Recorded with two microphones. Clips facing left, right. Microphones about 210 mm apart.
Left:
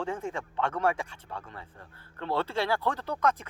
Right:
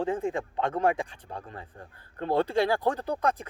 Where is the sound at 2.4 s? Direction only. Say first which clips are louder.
Right 4 dB; 15° right (ahead or behind).